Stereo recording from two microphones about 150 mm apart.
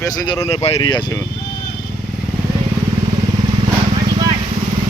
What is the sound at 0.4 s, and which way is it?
Speech, 40° left (ahead or behind).